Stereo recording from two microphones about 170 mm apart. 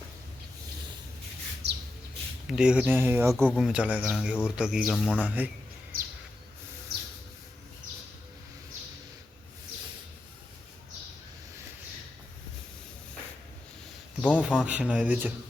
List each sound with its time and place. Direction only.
1.6 s bird: 85° right
2.5 s speech: 5° right (ahead or behind)
3.3 s speech: 5° left (ahead or behind)
3.7 s speech: 5° right (ahead or behind)
4.9 s a man's voice: 5° left (ahead or behind)
5.2 s speech: 10° right (ahead or behind)
5.9 s a sound: 60° right (ahead or behind)
14.2 s a man's voice: 10° left (ahead or behind)
14.4 s speech: 5° right (ahead or behind)